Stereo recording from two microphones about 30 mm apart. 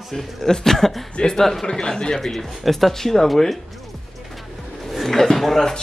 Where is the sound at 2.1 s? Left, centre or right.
Centre.